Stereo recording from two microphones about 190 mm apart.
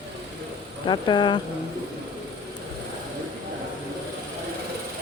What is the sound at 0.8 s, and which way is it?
Speech, 25° left (ahead or behind).